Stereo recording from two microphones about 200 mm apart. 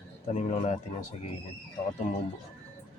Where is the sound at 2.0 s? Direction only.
40° left (ahead or behind).